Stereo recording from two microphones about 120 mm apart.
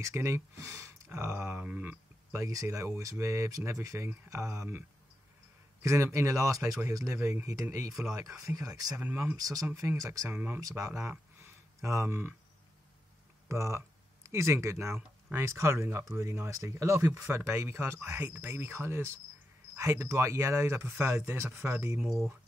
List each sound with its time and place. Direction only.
0.0 s speech: 20° right (ahead or behind)
1.3 s speech: 10° right (ahead or behind)
2.4 s speech: 25° right (ahead or behind)
7.9 s speech: 5° right (ahead or behind)
9.4 s speech: 30° right (ahead or behind)
13.5 s speech: 25° right (ahead or behind)
22.0 s speech: centre (ahead or behind)